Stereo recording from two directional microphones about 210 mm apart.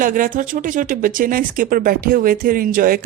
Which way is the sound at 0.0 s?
40° right (ahead or behind).